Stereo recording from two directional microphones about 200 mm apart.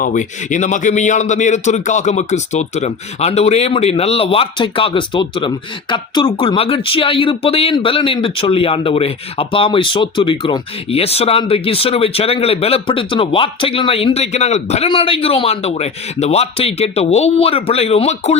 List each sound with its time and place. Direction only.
0.0 s a man's voice: 40° left (ahead or behind)